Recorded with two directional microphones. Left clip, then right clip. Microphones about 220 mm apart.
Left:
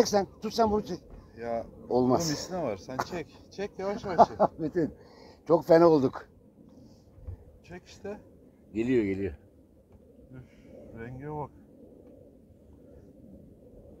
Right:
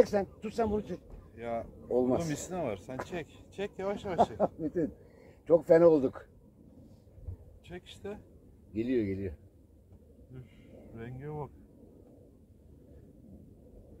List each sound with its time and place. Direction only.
0.0 s speech: 35° left (ahead or behind)
1.3 s speech: centre (ahead or behind)
1.9 s speech: 40° left (ahead or behind)
2.4 s speech: 5° left (ahead or behind)
4.1 s speech: 35° left (ahead or behind)
7.7 s speech: centre (ahead or behind)
8.7 s a man's voice: 50° left (ahead or behind)
11.0 s speech: 5° right (ahead or behind)